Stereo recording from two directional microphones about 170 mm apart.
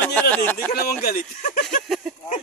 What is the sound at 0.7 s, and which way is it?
Speech, 65° left (ahead or behind).